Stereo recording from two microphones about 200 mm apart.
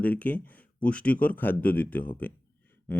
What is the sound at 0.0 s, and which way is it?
Speech, 5° left (ahead or behind).